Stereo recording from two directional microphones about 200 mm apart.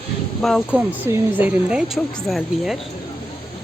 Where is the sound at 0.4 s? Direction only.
Centre (ahead or behind).